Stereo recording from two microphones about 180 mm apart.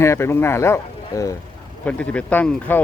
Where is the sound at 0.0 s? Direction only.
15° left (ahead or behind).